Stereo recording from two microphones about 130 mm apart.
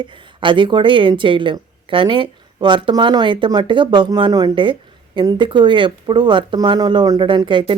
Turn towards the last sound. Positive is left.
turn(degrees=-35)  # may be behind; listen again after turning